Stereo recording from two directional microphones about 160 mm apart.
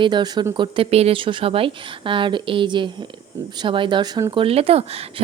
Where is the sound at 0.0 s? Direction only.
30° right (ahead or behind).